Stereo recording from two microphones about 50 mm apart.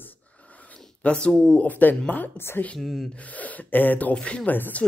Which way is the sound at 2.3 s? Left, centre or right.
Left.